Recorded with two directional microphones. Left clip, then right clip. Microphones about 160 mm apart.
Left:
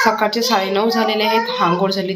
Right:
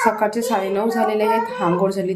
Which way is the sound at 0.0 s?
10° right (ahead or behind).